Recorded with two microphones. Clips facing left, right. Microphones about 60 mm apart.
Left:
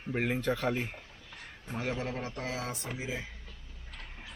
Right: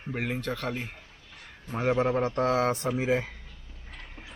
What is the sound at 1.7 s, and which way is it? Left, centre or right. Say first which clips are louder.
Speech: right 10 dB; right.